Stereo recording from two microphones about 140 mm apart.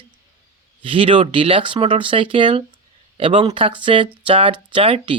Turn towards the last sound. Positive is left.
turn(degrees=-40)  # may be behind; listen again after turning